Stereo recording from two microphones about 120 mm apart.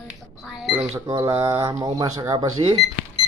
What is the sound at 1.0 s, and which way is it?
Speech, 30° right (ahead or behind).